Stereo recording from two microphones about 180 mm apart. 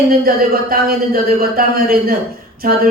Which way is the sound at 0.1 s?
55° right (ahead or behind).